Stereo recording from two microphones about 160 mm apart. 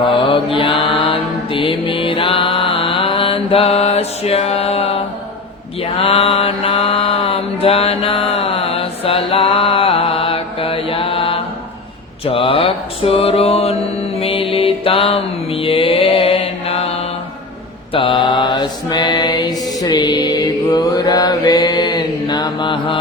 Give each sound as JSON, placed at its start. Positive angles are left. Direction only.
{"t": 0.0, "sound": "mantra", "side_deg": 35}
{"t": 12.2, "sound": "a sound", "side_deg": 35}
{"t": 14.2, "sound": "mantra", "side_deg": 35}
{"t": 17.9, "sound": "mantra", "side_deg": 30}